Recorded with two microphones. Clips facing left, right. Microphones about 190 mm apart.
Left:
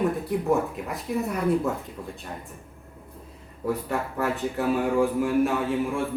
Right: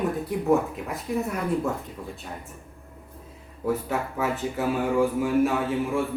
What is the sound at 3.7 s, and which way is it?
Speech, centre (ahead or behind).